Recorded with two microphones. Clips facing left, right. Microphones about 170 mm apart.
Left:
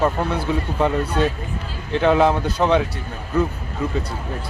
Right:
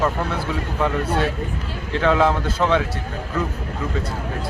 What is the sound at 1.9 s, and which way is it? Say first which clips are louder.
Speech: left 2 dB; 20° left (ahead or behind).